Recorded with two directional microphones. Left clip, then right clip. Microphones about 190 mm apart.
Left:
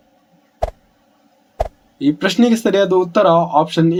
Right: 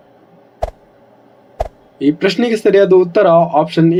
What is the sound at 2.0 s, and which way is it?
Speech, 20° left (ahead or behind).